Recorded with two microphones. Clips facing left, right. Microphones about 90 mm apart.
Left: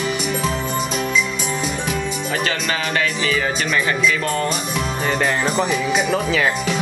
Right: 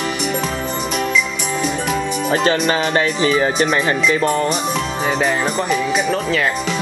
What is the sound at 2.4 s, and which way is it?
Speech, 30° right (ahead or behind).